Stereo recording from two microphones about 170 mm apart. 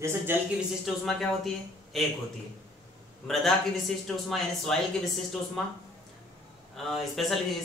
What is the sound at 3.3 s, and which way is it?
Speech, centre (ahead or behind).